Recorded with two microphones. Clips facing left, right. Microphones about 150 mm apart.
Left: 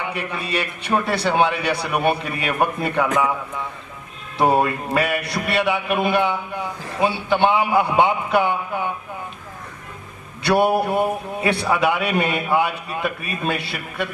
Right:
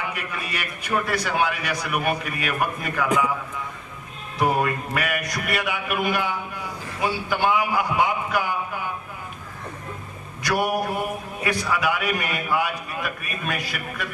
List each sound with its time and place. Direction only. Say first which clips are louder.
0.1 s a man's voice: left 6 dB; 30° left (ahead or behind)
4.4 s a man's voice: left 4 dB; 30° left (ahead or behind)
10.4 s a man's voice: left 6 dB; 30° left (ahead or behind)